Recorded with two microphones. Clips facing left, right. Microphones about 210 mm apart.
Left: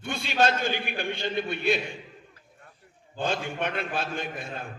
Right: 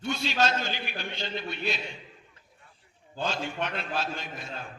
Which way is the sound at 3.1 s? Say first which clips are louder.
Left 2 dB; 55° left (ahead or behind).